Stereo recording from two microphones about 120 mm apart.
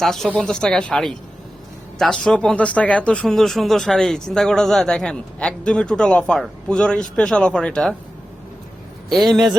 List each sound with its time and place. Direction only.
0.0 s speech: 5° left (ahead or behind)